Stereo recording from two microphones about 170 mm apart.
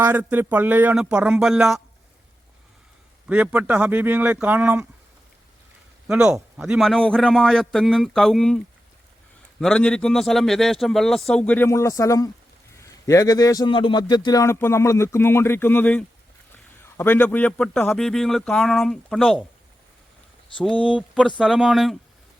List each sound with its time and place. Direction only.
0.0 s a man's voice: 10° right (ahead or behind)
3.2 s speech: 10° right (ahead or behind)
6.1 s a man's voice: 5° right (ahead or behind)
20.8 s a man's voice: 5° right (ahead or behind)